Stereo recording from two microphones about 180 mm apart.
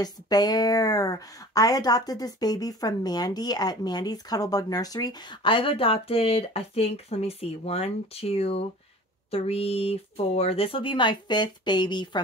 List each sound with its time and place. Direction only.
0.0 s speech: 20° left (ahead or behind)